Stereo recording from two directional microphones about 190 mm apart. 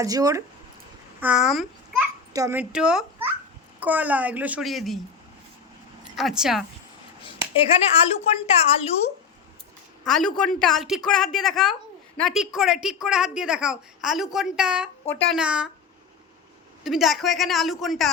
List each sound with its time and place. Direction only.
0.0 s speech: 20° right (ahead or behind)
1.2 s a child's voice: 5° right (ahead or behind)
2.3 s a child's voice: 15° right (ahead or behind)
6.1 s a woman's voice: centre (ahead or behind)
7.7 s a woman's voice: 30° left (ahead or behind)
10.0 s a woman's voice: 5° left (ahead or behind)
15.1 s speech: 5° left (ahead or behind)
15.4 s a woman's voice: 5° right (ahead or behind)
16.8 s a woman's voice: centre (ahead or behind)